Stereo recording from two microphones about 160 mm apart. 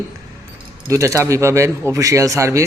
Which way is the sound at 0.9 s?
20° right (ahead or behind).